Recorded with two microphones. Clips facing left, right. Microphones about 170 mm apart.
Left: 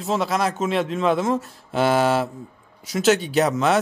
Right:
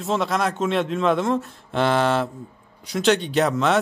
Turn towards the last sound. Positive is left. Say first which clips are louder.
# left 1 dB
turn(degrees=0)  # may be behind; listen again after turning